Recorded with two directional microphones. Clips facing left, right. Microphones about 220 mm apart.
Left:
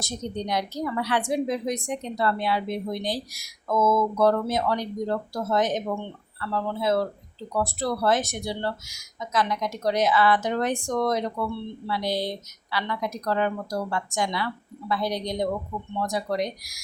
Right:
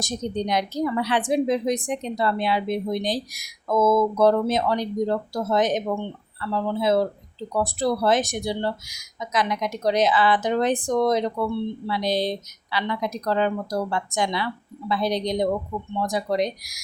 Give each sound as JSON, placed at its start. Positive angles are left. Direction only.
{"t": 0.0, "sound": "a woman's voice", "side_deg": -20}